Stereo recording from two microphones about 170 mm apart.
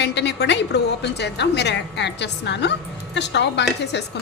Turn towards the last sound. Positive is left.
turn(degrees=90)